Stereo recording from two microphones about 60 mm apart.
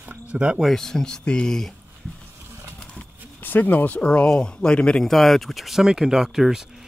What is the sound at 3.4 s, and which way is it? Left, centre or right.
Speech, left.